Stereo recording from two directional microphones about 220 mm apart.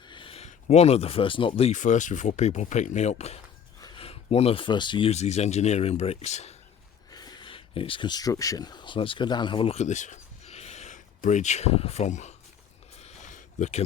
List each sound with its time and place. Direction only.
0.1 s speech: 25° left (ahead or behind)
7.1 s speech: 20° left (ahead or behind)
13.0 s a sound: 30° left (ahead or behind)